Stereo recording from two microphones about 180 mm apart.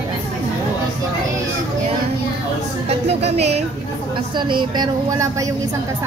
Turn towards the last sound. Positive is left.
turn(degrees=-25)  # may be behind; listen again after turning